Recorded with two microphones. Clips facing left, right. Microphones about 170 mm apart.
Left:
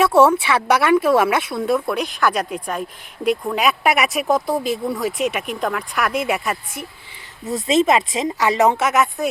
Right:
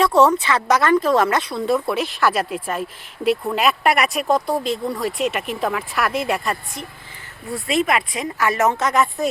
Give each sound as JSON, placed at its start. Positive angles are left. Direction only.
{"t": 0.0, "sound": "speech", "side_deg": 5}
{"t": 7.5, "sound": "speech", "side_deg": 25}